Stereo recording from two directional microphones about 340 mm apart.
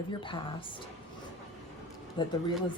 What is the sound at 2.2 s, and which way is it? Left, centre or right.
Speech, centre.